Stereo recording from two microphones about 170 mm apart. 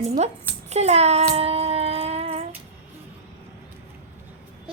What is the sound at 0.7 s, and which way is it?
Child singing, 40° right (ahead or behind).